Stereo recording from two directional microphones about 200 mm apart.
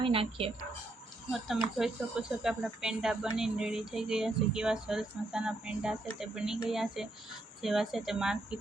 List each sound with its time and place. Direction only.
0.0 s speech: 30° right (ahead or behind)
1.8 s speech: 5° right (ahead or behind)